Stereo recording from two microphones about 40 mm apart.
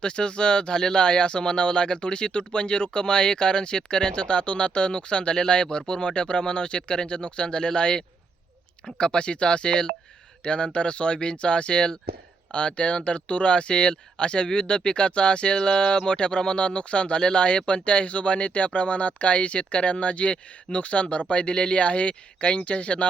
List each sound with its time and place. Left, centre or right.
0.0 s speech: left